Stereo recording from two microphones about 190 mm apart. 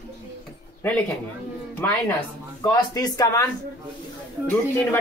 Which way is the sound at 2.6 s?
20° left (ahead or behind).